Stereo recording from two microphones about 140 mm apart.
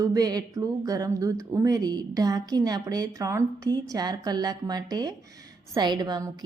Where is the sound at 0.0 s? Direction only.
25° right (ahead or behind).